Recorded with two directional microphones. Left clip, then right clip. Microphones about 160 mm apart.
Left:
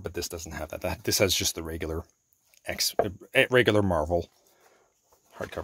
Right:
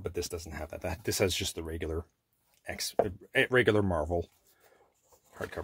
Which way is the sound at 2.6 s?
45° left (ahead or behind).